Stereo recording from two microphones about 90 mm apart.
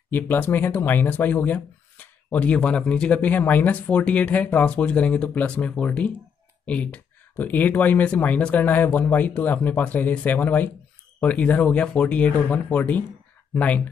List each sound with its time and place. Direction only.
0.1 s speech: 20° left (ahead or behind)